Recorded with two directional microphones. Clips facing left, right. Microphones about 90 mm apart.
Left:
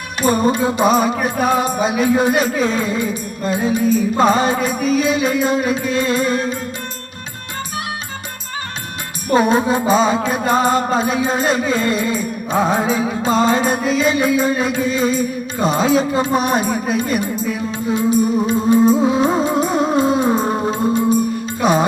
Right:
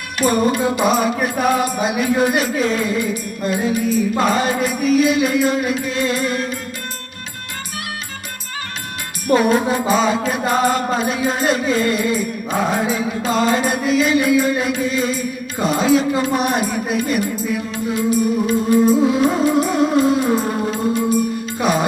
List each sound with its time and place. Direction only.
0.2 s music: 25° left (ahead or behind)
9.2 s music: 25° left (ahead or behind)